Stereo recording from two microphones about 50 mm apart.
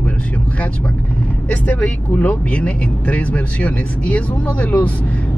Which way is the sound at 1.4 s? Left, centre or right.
Left.